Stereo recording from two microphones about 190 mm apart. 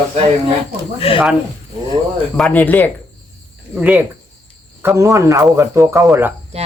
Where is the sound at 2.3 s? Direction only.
5° left (ahead or behind).